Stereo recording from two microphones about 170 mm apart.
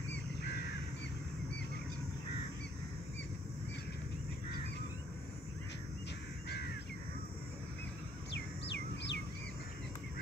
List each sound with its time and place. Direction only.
8.3 s bird: 90° left